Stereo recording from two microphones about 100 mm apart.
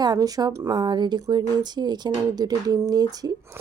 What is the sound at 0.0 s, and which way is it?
Speech, 40° right (ahead or behind).